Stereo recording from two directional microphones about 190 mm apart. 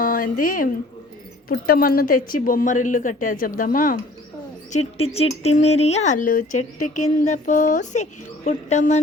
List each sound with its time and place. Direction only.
0.0 s a woman's voice: 45° left (ahead or behind)
4.7 s speech: 35° left (ahead or behind)